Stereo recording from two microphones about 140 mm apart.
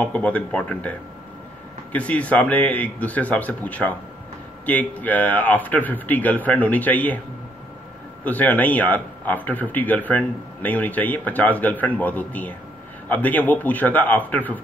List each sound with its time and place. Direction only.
0.0 s speech: 10° left (ahead or behind)
8.2 s speech: 10° left (ahead or behind)